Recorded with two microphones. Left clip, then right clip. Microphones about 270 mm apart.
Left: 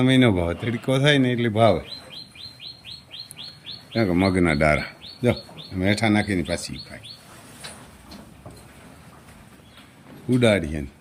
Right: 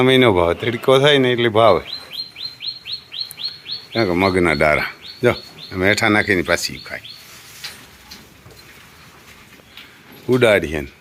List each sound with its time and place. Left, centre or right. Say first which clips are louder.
0.0 s speech: right 7 dB; centre
3.9 s speech: right 5 dB; centre
10.2 s speech: right 6 dB; centre